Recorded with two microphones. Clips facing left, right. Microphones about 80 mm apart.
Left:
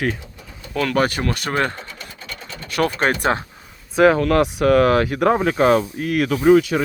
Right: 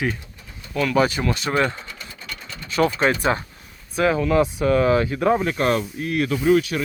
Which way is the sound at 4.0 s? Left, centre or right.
Left.